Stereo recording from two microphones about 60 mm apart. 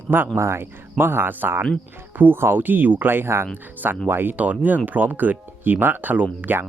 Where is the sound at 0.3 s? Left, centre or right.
Right.